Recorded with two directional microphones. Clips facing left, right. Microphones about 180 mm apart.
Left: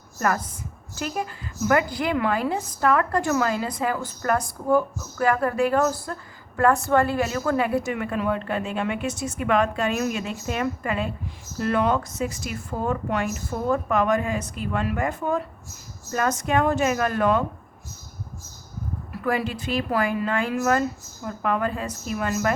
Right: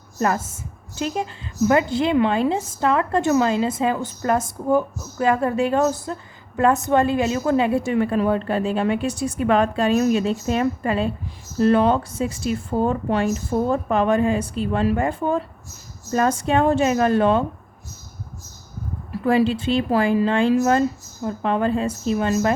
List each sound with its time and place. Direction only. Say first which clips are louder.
0.2 s a woman's voice: right 3 dB; 25° right (ahead or behind)
19.1 s speech: right 7 dB; 30° right (ahead or behind)